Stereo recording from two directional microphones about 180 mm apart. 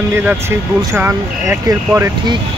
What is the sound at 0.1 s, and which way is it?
Speech, 10° right (ahead or behind).